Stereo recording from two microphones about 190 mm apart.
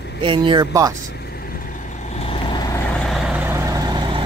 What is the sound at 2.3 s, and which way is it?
Vehicle, 25° left (ahead or behind).